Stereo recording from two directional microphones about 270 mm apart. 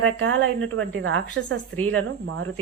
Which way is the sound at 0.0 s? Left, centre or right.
Right.